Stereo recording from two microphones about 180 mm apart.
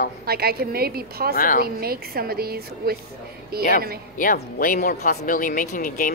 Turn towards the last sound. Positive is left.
turn(degrees=55)  # may be behind; listen again after turning